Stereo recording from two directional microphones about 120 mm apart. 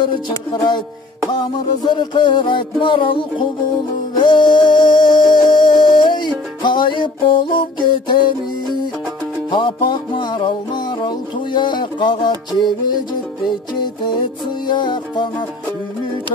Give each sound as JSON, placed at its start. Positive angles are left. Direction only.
{"t": 0.5, "sound": "music", "side_deg": 40}
{"t": 2.0, "sound": "music", "side_deg": 40}
{"t": 9.5, "sound": "music", "side_deg": 45}
{"t": 14.7, "sound": "music", "side_deg": 40}